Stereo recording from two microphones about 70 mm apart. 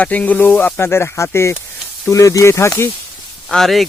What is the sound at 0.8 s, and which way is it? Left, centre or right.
Speech, left.